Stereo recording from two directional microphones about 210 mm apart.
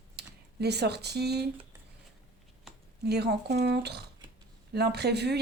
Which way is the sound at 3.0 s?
50° right (ahead or behind).